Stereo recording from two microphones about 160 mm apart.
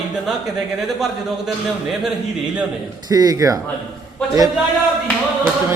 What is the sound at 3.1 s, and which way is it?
Speech, 25° right (ahead or behind).